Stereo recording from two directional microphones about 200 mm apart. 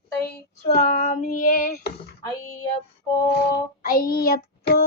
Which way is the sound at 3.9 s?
45° left (ahead or behind).